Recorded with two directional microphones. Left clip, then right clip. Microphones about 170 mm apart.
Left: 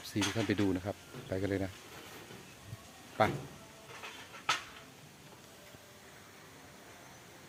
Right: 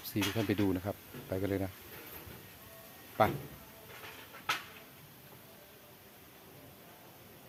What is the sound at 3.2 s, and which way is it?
Speech, 20° right (ahead or behind).